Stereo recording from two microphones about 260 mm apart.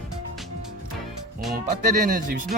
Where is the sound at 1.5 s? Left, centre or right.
Right.